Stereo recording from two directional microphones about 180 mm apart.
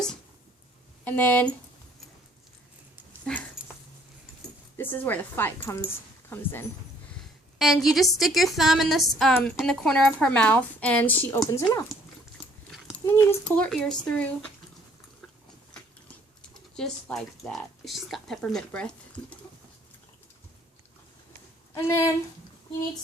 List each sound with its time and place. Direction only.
1.0 s speech: 10° left (ahead or behind)
3.6 s dog: centre (ahead or behind)
4.8 s speech: 10° left (ahead or behind)
7.6 s speech: centre (ahead or behind)
13.1 s speech: 15° left (ahead or behind)
16.7 s speech: 5° left (ahead or behind)
21.8 s speech: 15° left (ahead or behind)